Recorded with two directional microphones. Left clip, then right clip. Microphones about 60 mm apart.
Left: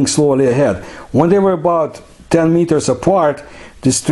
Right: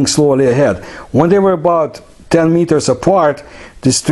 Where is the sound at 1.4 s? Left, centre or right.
Centre.